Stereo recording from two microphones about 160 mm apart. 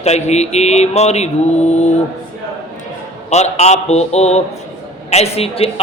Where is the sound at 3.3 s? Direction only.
45° left (ahead or behind).